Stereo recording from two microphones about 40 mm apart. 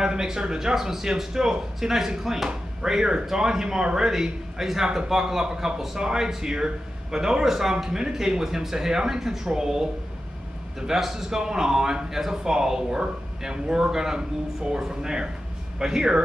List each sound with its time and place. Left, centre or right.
0.0 s speech: centre
10.9 s speech: centre